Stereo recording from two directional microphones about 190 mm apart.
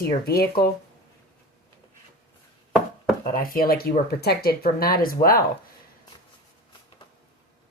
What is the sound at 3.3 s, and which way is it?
Speech, 50° left (ahead or behind).